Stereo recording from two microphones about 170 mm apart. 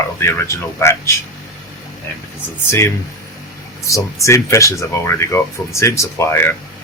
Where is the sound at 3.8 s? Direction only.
20° left (ahead or behind).